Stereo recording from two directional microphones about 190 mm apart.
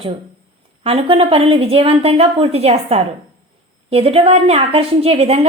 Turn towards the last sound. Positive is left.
turn(degrees=-30)  # may be behind; listen again after turning